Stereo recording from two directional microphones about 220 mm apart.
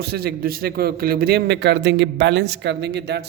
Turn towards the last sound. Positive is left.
turn(degrees=-50)  # may be behind; listen again after turning